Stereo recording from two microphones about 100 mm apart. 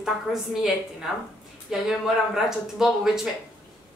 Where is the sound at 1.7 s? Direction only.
5° right (ahead or behind).